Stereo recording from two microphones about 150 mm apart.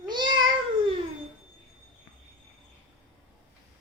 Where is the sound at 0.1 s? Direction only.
30° right (ahead or behind).